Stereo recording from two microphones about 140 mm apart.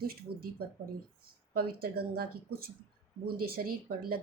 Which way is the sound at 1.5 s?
90° right.